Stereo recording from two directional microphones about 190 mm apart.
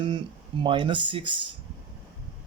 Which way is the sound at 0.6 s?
25° right (ahead or behind).